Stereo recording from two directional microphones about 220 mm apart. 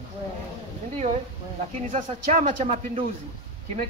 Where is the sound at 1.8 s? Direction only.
35° right (ahead or behind).